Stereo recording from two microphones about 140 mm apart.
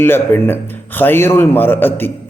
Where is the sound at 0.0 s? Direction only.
15° left (ahead or behind).